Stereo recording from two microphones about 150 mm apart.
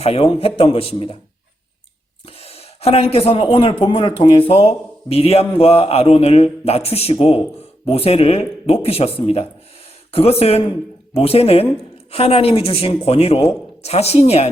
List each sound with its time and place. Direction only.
0.0 s speech: 40° left (ahead or behind)
2.2 s speech: 40° left (ahead or behind)